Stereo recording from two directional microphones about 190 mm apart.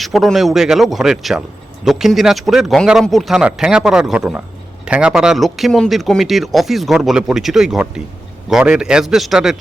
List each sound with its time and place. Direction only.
0.0 s speech: centre (ahead or behind)